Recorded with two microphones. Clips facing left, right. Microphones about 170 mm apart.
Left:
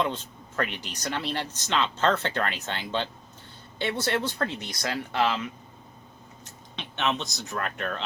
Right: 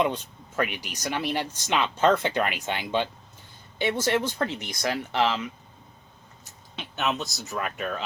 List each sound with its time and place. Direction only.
0.0 s speech: 15° right (ahead or behind)
6.4 s speech: 5° right (ahead or behind)